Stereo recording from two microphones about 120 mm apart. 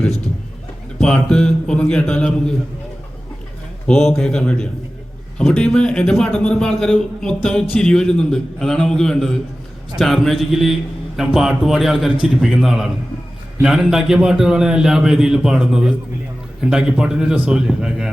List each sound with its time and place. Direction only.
0.9 s a man's voice: 5° left (ahead or behind)
3.8 s a man's voice: 5° left (ahead or behind)